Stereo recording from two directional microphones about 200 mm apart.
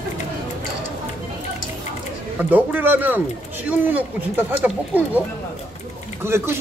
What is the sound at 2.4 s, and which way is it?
Speech, 10° right (ahead or behind).